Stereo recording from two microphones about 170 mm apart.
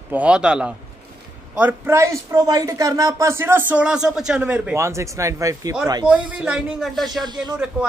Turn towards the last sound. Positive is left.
turn(degrees=-25)  # may be behind; listen again after turning